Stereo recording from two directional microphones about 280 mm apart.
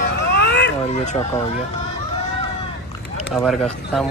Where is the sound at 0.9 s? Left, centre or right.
Left.